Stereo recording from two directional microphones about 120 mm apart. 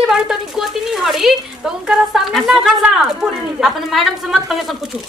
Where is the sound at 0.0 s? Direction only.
5° right (ahead or behind).